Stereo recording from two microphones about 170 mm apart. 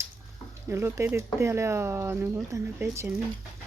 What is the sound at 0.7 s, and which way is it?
Speech, 15° right (ahead or behind).